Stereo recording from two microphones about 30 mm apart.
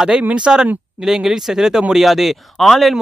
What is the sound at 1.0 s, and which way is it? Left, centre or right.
Speech, centre.